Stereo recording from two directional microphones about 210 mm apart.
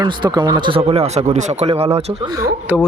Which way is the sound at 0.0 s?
20° right (ahead or behind).